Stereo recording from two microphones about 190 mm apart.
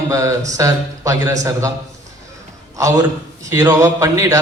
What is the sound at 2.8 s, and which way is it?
A man's voice, 15° right (ahead or behind).